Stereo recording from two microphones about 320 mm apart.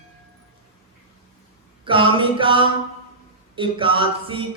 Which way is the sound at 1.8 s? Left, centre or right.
Centre.